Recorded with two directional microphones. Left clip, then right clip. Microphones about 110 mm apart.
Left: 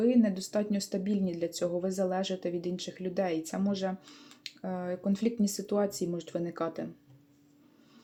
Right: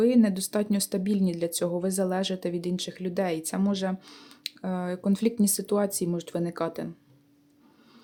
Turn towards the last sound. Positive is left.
turn(degrees=-40)  # may be behind; listen again after turning